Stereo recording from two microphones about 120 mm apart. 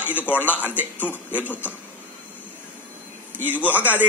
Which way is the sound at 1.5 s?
15° left (ahead or behind).